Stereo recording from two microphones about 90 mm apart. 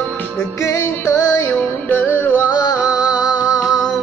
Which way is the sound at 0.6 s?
35° left (ahead or behind).